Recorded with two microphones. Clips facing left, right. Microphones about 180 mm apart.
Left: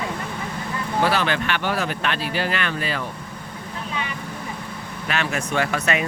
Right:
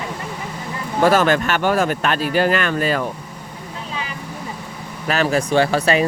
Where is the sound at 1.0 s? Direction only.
45° right (ahead or behind).